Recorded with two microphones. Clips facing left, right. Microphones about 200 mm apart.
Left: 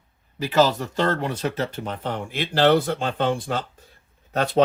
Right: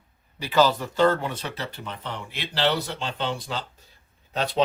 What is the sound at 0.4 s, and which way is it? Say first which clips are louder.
Speech: left 2 dB; 45° left (ahead or behind).